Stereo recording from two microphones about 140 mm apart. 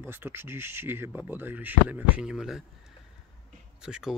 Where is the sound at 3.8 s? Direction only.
5° right (ahead or behind).